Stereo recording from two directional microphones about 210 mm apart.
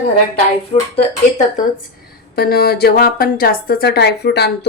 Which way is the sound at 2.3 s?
45° left (ahead or behind).